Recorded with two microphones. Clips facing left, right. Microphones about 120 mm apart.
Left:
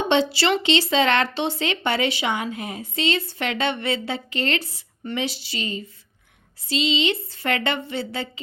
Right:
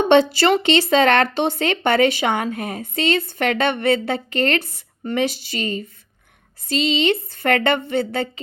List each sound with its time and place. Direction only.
0.1 s speech: 50° right (ahead or behind)